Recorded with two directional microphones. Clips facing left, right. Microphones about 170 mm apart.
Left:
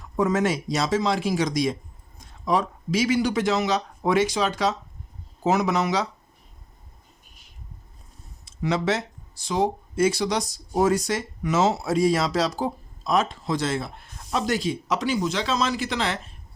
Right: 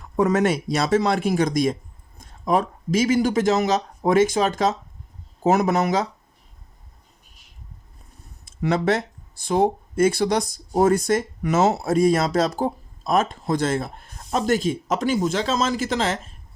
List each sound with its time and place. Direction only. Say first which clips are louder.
0.2 s speech: right 3 dB; 60° right (ahead or behind)
8.4 s speech: right 3 dB; 55° right (ahead or behind)